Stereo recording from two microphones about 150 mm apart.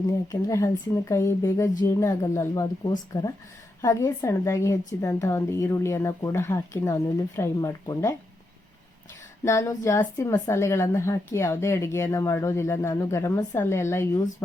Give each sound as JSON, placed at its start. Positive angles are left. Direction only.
{"t": 0.3, "sound": "a woman's voice", "side_deg": 20}
{"t": 9.4, "sound": "a woman's voice", "side_deg": 20}